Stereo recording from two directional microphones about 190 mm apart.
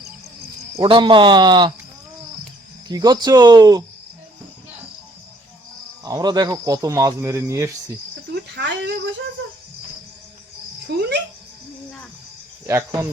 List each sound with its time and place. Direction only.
0.8 s speech: 25° right (ahead or behind)
2.8 s speech: 20° right (ahead or behind)
6.1 s speech: 20° right (ahead or behind)
8.5 s a sound: 60° right (ahead or behind)
10.9 s speech: 60° right (ahead or behind)
12.6 s speech: 15° right (ahead or behind)